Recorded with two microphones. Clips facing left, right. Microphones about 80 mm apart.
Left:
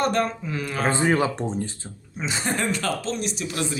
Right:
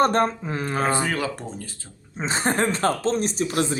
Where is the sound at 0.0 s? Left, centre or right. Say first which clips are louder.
Right 3 dB; right.